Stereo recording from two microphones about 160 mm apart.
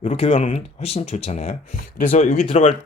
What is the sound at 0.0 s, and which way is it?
Speech, 45° left (ahead or behind).